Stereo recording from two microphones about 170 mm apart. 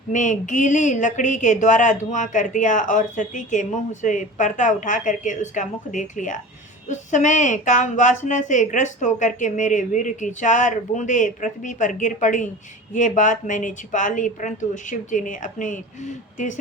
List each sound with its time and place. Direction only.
0.1 s speech: 45° left (ahead or behind)